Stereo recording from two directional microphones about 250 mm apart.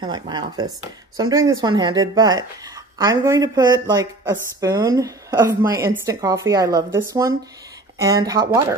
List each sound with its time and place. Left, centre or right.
0.0 s speech: centre